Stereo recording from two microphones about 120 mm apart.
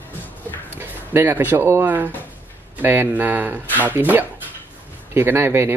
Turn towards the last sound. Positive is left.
turn(degrees=-20)  # may be behind; listen again after turning